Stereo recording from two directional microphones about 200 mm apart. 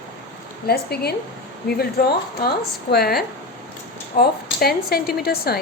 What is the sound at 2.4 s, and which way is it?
Speech, 50° left (ahead or behind).